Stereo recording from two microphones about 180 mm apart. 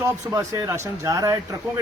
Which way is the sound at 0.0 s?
20° right (ahead or behind).